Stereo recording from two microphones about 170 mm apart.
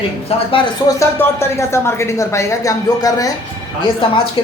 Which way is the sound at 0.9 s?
20° left (ahead or behind).